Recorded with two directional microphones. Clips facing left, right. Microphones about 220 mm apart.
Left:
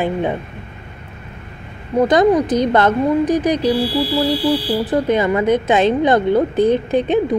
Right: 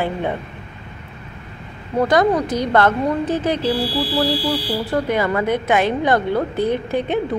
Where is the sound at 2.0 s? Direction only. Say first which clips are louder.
Left 3 dB; 20° left (ahead or behind).